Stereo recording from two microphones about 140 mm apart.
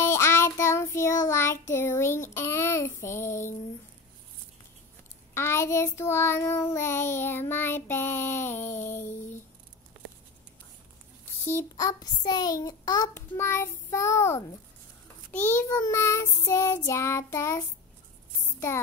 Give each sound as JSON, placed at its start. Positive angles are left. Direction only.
{"t": 0.0, "sound": "child singing", "side_deg": 20}
{"t": 5.3, "sound": "child singing", "side_deg": 20}
{"t": 11.4, "sound": "child singing", "side_deg": 20}